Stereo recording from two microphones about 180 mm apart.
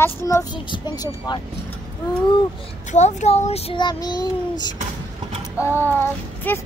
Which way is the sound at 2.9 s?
40° left (ahead or behind).